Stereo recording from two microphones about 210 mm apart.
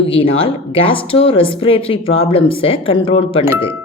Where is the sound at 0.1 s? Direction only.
25° left (ahead or behind).